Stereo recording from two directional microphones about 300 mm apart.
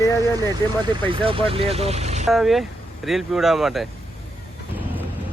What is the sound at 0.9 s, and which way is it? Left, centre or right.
Speech, centre.